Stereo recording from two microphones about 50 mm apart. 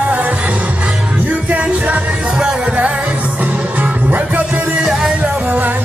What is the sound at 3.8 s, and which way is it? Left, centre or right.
Music, right.